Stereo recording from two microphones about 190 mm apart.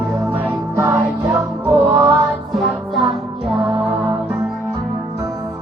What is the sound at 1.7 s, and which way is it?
Music, 25° right (ahead or behind).